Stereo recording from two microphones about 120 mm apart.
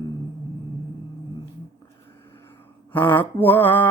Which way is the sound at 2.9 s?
15° left (ahead or behind).